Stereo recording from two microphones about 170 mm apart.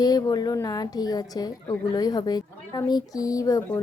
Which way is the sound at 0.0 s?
20° left (ahead or behind).